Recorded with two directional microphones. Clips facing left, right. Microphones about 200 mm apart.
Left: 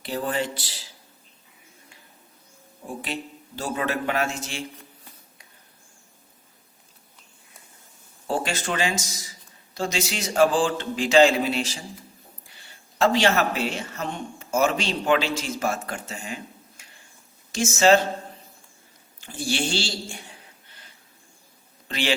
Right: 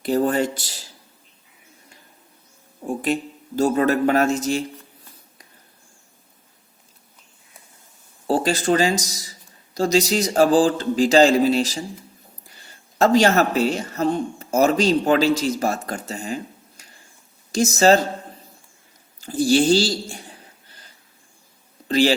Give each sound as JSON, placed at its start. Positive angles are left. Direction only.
{"t": 0.0, "sound": "speech", "side_deg": -45}
{"t": 3.0, "sound": "speech", "side_deg": -45}
{"t": 8.3, "sound": "speech", "side_deg": -35}
{"t": 19.2, "sound": "speech", "side_deg": -40}
{"t": 21.8, "sound": "a man's voice", "side_deg": -35}